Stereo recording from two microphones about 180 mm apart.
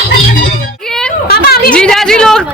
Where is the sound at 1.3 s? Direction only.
55° left (ahead or behind).